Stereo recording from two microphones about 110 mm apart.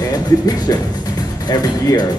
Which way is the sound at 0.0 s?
35° left (ahead or behind).